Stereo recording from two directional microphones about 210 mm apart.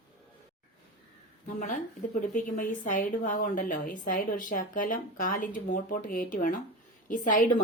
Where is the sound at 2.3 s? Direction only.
40° left (ahead or behind).